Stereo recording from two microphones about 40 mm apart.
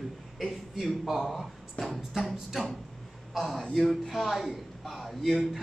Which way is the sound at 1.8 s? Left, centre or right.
Left.